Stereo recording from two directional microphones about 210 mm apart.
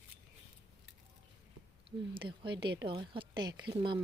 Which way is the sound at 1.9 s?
25° right (ahead or behind).